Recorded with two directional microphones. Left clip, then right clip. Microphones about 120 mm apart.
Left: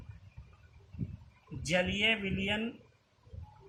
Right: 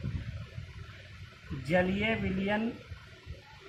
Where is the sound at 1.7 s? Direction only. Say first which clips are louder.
Even; 80° left.